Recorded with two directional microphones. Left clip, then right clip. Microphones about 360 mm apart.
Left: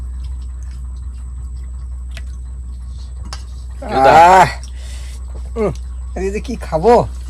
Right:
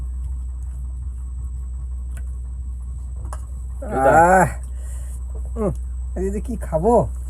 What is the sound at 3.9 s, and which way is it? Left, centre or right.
Roaring cats, centre.